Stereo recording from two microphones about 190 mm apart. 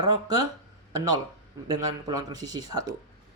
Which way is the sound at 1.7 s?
20° right (ahead or behind).